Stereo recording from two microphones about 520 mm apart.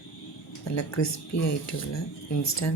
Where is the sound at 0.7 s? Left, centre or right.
Left.